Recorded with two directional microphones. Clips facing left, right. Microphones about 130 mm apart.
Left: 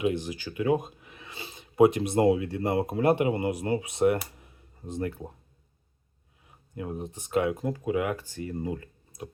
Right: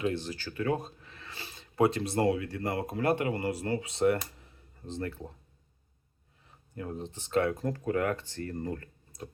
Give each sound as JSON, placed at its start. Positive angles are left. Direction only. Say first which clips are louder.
{"t": 0.0, "sound": "speech", "louder": "left 4 dB", "side_deg": 15}
{"t": 6.7, "sound": "speech", "louder": "left 3 dB", "side_deg": 15}